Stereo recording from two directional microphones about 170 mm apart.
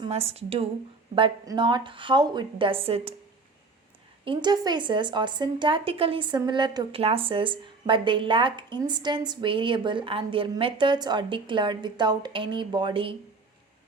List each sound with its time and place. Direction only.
0.0 s a woman's voice: 35° right (ahead or behind)
4.3 s speech: 25° right (ahead or behind)